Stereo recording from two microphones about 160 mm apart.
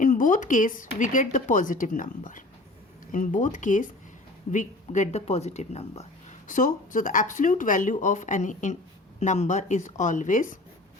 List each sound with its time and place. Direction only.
0.0 s speech: 55° left (ahead or behind)
6.5 s speech: 55° left (ahead or behind)